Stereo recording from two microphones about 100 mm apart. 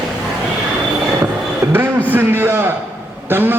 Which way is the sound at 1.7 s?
20° right (ahead or behind).